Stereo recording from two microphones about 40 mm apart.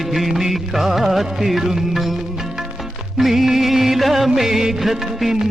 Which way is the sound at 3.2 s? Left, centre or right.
Centre.